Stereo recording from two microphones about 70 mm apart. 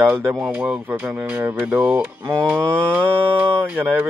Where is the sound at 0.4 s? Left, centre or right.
Centre.